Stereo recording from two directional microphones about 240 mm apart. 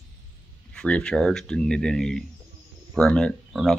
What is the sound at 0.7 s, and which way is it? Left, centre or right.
Speech, centre.